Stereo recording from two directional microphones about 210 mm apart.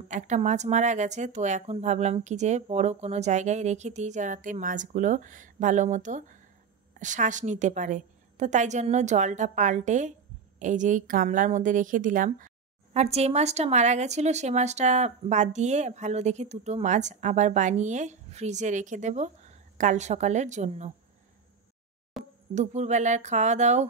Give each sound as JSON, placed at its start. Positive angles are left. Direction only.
{"t": 0.1, "sound": "a woman's voice", "side_deg": -35}
{"t": 22.2, "sound": "a sound", "side_deg": 0}
{"t": 22.5, "sound": "a woman's voice", "side_deg": -35}